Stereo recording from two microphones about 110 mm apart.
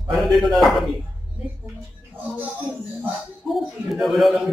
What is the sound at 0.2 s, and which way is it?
Speech, centre (ahead or behind).